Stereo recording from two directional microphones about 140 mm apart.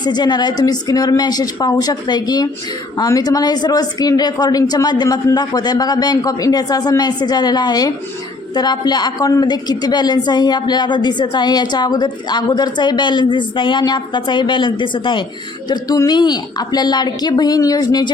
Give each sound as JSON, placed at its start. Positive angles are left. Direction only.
{"t": 0.0, "sound": "a woman's voice", "side_deg": 30}